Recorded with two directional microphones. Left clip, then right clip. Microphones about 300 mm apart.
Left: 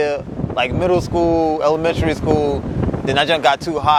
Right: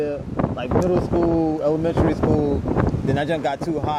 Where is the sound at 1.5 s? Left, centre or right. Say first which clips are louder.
Left 4 dB; left.